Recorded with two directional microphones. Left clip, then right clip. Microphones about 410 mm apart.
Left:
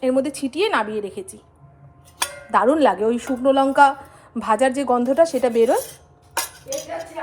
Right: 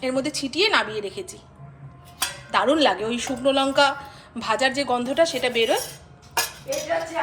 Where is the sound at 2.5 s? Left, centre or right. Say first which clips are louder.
Left 3 dB; centre.